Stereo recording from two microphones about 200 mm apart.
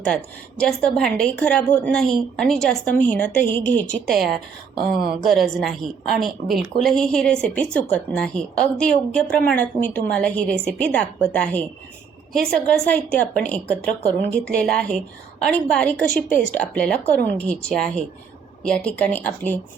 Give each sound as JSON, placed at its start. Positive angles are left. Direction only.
{"t": 0.6, "sound": "speech", "side_deg": 5}
{"t": 16.3, "sound": "speech", "side_deg": 40}
{"t": 16.6, "sound": "speech", "side_deg": 5}